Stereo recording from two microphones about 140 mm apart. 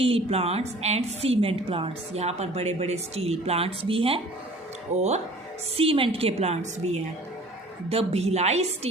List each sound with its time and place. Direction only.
0.0 s a woman's voice: 45° right (ahead or behind)
4.9 s a woman's voice: 50° right (ahead or behind)
5.7 s a woman's voice: 40° right (ahead or behind)